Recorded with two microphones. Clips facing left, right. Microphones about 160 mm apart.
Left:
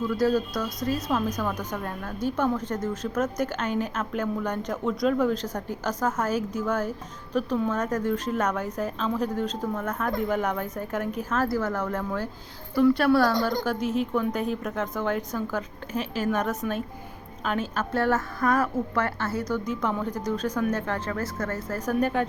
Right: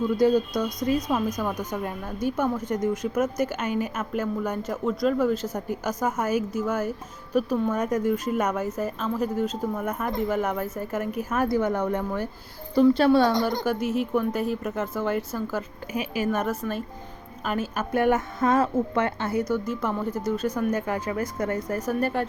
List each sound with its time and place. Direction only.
0.1 s a woman's voice: 20° right (ahead or behind)
12.7 s a woman's voice: 25° right (ahead or behind); by 22.3 s 5° right (ahead or behind)